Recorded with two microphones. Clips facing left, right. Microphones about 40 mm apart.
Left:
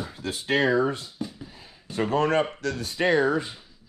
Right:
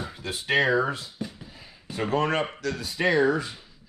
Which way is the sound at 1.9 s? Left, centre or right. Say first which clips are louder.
Left 2 dB; right.